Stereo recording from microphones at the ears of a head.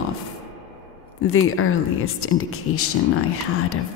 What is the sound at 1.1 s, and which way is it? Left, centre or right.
Speech, left.